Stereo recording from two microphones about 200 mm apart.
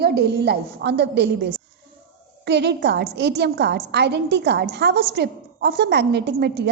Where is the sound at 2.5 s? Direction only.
60° right (ahead or behind).